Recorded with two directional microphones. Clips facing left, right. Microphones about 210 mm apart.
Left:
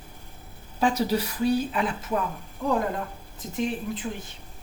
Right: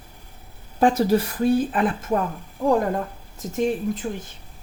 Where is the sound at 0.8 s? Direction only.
50° right (ahead or behind).